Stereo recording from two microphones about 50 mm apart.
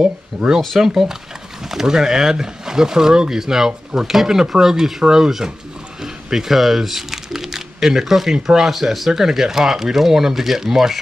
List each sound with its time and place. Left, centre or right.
0.0 s speech: centre